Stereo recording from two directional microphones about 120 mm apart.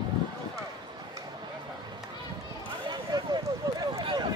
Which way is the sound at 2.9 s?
35° right (ahead or behind).